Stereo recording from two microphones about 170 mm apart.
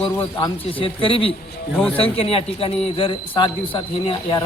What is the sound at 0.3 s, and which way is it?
A man's voice, 30° left (ahead or behind).